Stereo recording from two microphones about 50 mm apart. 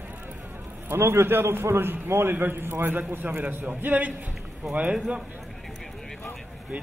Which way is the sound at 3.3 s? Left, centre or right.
Right.